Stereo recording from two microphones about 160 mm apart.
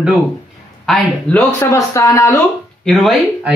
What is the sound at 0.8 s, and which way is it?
Speech, 5° left (ahead or behind).